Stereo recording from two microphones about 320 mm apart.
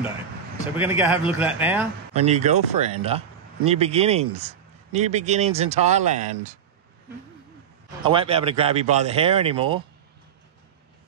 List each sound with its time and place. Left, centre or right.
0.7 s speech: centre
2.1 s speech: centre
8.0 s speech: centre